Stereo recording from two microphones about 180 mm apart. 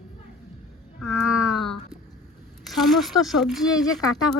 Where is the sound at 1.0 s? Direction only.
5° right (ahead or behind).